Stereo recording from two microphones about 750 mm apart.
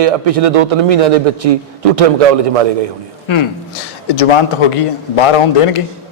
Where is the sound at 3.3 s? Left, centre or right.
Left.